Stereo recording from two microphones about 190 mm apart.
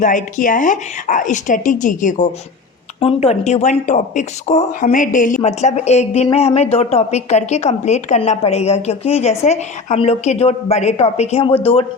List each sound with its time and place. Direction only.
0.0 s a woman's voice: 45° left (ahead or behind)